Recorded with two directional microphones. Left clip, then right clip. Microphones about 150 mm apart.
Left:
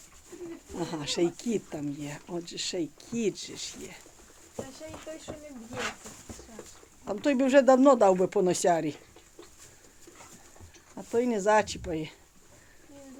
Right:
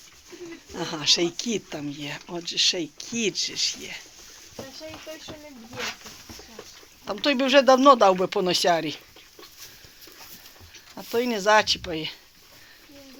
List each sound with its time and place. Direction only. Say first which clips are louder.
0.8 s speech: right 7 dB; centre (ahead or behind)
7.1 s speech: right 3 dB; 15° left (ahead or behind)
10.9 s speech: right 2 dB; 10° left (ahead or behind)